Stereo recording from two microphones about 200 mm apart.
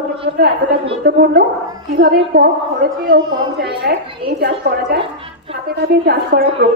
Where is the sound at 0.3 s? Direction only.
50° right (ahead or behind).